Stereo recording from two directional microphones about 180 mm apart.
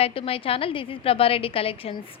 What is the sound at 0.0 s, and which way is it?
A woman's voice, 30° left (ahead or behind).